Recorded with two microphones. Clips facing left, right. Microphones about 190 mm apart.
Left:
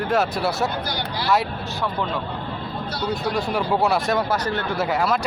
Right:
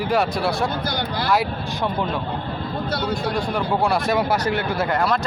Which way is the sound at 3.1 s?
5° left (ahead or behind).